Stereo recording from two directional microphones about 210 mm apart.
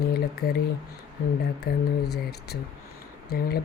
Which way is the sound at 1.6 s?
50° left (ahead or behind).